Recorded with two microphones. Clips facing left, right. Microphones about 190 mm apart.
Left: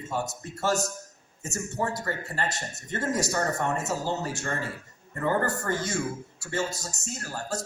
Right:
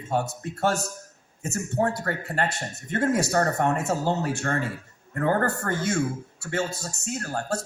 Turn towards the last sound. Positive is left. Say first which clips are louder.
# right 5 dB
turn(degrees=-55)  # may be behind; listen again after turning